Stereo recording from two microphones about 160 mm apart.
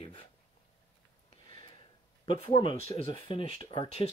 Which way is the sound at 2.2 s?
35° left (ahead or behind).